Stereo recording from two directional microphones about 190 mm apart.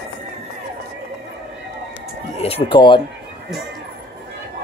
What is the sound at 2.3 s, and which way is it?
Speech, 30° left (ahead or behind).